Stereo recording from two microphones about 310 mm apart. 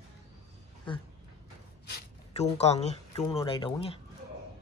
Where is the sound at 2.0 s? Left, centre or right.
Left.